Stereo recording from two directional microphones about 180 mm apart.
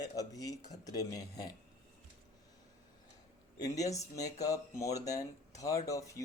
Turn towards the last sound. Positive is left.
turn(degrees=20)  # may be behind; listen again after turning